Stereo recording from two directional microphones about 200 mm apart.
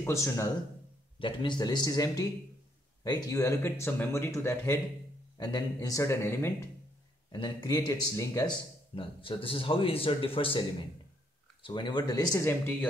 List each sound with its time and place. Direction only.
0.0 s speech: 15° left (ahead or behind)